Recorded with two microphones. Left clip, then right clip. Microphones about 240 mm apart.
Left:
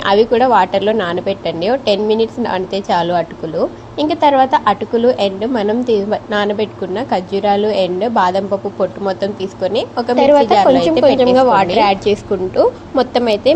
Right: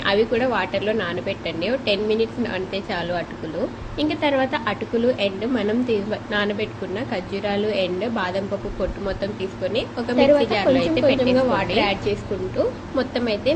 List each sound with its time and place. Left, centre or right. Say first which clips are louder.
0.0 s a woman's voice: left 8 dB; left